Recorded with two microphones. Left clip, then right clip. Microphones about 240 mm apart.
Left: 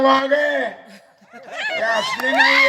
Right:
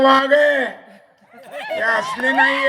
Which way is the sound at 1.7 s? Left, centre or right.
Right.